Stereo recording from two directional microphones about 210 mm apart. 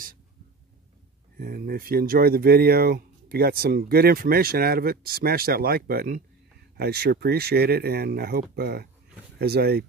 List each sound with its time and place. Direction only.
1.4 s speech: 45° right (ahead or behind)